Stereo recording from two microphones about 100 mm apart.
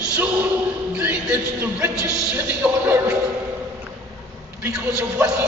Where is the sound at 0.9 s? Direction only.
15° right (ahead or behind).